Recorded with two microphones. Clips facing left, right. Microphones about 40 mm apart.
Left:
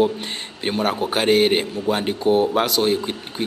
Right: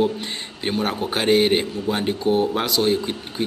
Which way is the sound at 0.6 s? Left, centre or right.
Centre.